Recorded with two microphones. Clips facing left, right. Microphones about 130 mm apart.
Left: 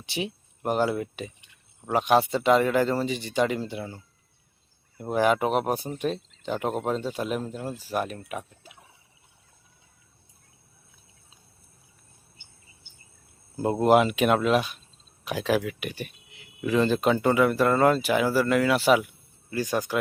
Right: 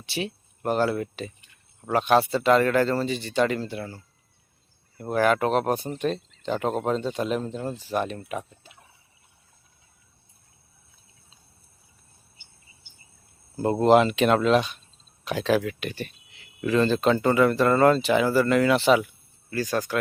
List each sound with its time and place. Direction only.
0.0 s speech: 15° left (ahead or behind)
13.6 s speech: 10° left (ahead or behind)